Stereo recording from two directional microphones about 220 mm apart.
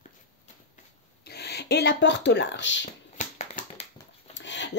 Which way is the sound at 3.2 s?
35° left (ahead or behind).